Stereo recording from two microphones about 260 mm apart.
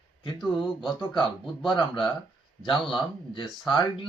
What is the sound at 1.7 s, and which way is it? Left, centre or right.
Speech, centre.